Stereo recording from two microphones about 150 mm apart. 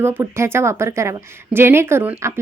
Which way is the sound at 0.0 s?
15° right (ahead or behind).